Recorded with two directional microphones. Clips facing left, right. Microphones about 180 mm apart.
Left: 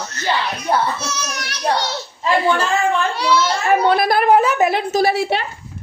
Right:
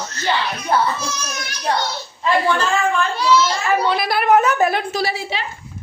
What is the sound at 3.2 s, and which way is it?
A child's voice, 60° left (ahead or behind).